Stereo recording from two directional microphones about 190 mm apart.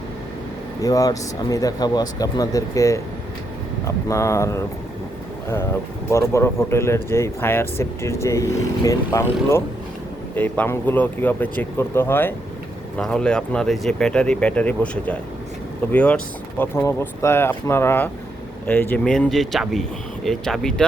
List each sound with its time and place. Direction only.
0.8 s speech: 20° left (ahead or behind)
6.1 s speech: 15° left (ahead or behind)